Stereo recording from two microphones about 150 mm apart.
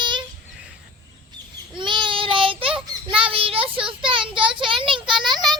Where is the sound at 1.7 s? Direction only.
30° right (ahead or behind).